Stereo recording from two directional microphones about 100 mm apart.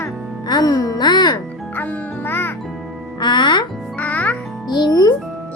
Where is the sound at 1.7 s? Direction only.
15° left (ahead or behind).